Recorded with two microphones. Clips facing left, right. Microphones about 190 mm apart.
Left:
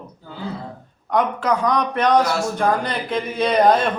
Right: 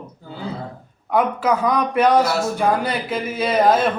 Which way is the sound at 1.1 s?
5° right (ahead or behind).